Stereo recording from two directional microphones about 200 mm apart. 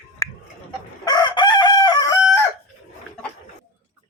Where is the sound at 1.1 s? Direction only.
20° left (ahead or behind).